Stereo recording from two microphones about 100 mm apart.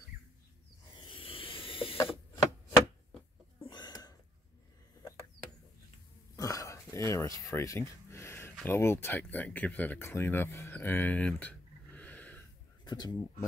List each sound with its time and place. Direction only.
1.0 s snake: 65° left (ahead or behind)
3.6 s a sound: 45° left (ahead or behind)
6.3 s throat clearing: 35° left (ahead or behind)
7.1 s a sound: 30° left (ahead or behind)
8.6 s speech: 25° left (ahead or behind)
12.8 s speech: 45° left (ahead or behind)